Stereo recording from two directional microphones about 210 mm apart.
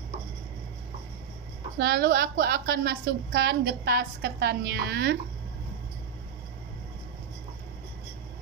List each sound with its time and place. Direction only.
1.8 s a woman's voice: 45° right (ahead or behind)